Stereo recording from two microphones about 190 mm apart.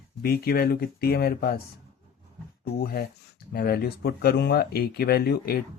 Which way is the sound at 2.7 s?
55° left (ahead or behind).